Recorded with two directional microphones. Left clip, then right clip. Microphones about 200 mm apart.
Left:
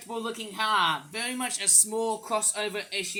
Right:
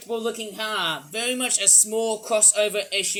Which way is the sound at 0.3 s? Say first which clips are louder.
Even; 20° left (ahead or behind).